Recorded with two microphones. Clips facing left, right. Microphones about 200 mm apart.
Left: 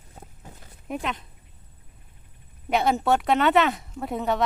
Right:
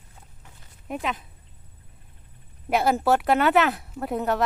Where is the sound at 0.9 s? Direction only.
Centre (ahead or behind).